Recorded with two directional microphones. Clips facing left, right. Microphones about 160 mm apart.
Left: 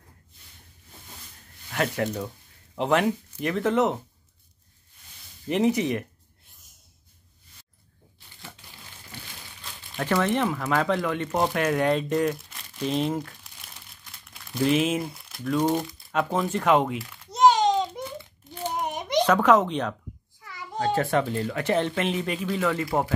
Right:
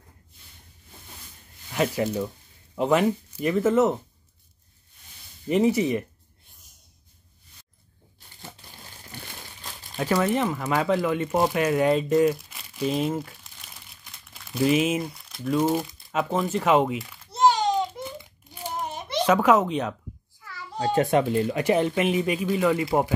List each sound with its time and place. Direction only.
1.7 s speech: 5° right (ahead or behind)
5.5 s speech: 5° right (ahead or behind)
9.9 s speech: 10° right (ahead or behind)
17.3 s a sound: 20° left (ahead or behind)
19.2 s speech: 10° right (ahead or behind)
20.8 s speech: 20° right (ahead or behind)